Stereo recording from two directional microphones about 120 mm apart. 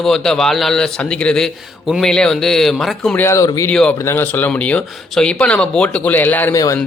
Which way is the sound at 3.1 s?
20° left (ahead or behind).